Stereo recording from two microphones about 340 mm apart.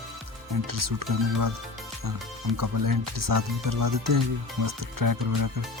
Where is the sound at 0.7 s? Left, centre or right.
Right.